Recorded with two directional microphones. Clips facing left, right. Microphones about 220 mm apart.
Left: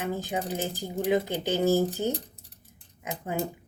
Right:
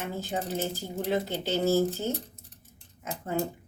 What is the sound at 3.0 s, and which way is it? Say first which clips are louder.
Dishes: left 2 dB; 15° left (ahead or behind).